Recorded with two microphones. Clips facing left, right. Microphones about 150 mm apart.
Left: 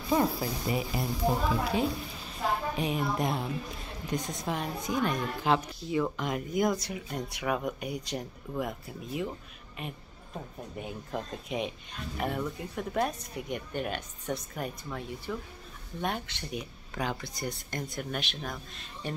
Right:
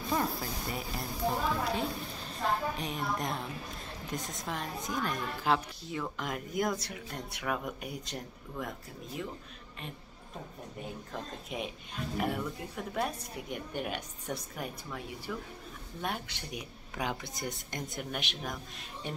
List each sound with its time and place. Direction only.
0.1 s a woman's voice: 5° left (ahead or behind)
11.4 s a woman's voice: centre (ahead or behind)